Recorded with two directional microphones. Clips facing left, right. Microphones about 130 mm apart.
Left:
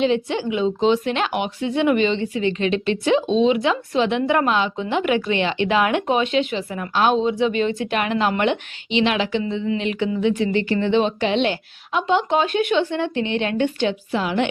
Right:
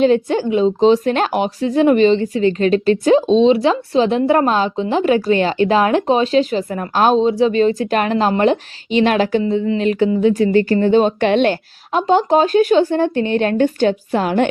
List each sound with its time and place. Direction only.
0.0 s speech: 45° right (ahead or behind)
11.9 s speech: 40° right (ahead or behind)